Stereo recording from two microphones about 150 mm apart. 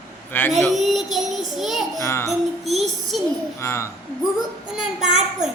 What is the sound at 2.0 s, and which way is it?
Speech, 15° left (ahead or behind).